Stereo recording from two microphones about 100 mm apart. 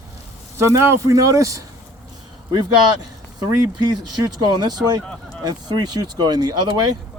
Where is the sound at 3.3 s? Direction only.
40° right (ahead or behind).